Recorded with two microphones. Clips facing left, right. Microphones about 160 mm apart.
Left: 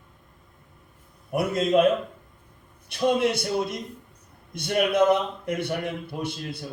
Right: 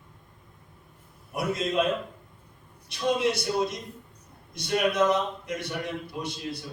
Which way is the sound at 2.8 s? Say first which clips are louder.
Left 3 dB; 55° left (ahead or behind).